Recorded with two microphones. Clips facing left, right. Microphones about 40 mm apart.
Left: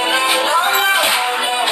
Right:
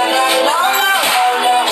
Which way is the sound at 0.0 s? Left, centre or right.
Centre.